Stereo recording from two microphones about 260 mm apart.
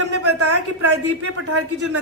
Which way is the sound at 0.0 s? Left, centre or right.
Right.